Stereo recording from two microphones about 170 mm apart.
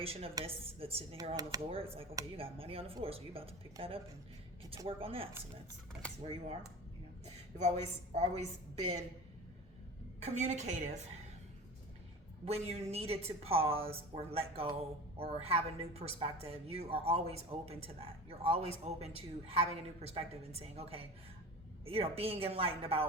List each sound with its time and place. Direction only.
0.0 s a woman's voice: 35° right (ahead or behind)
1.3 s speech: 20° right (ahead or behind)
1.7 s a woman's voice: 35° right (ahead or behind)
6.0 s speech: 5° left (ahead or behind)
8.1 s a woman's voice: 40° right (ahead or behind)
10.2 s a woman's voice: 40° right (ahead or behind)
12.5 s a woman's voice: 40° right (ahead or behind)